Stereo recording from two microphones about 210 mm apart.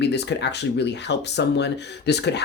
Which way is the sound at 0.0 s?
55° left (ahead or behind).